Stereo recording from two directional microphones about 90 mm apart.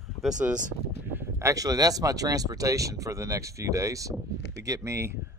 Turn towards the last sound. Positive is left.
turn(degrees=-30)  # may be behind; listen again after turning